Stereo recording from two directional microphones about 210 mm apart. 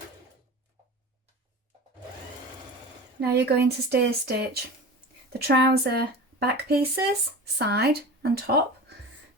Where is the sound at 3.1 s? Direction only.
50° right (ahead or behind).